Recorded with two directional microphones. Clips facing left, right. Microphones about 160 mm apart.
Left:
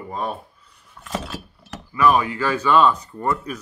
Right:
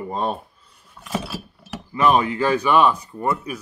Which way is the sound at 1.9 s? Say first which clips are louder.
Even; 25° right (ahead or behind).